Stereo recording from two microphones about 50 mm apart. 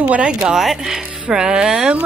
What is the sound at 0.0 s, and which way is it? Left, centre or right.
Speech, right.